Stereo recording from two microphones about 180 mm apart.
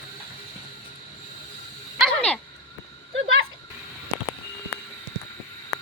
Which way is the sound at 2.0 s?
5° left (ahead or behind).